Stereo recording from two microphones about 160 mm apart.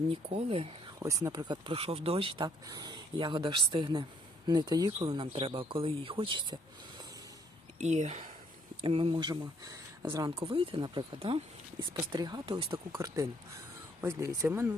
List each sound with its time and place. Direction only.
0.1 s speech: 35° right (ahead or behind)
0.9 s speech: 20° right (ahead or behind)
7.8 s speech: 45° right (ahead or behind)
8.8 s speech: 35° right (ahead or behind)
14.0 s speech: 15° right (ahead or behind)